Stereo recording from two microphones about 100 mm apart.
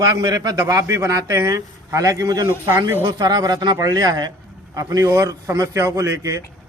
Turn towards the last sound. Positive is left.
turn(degrees=-35)  # may be behind; listen again after turning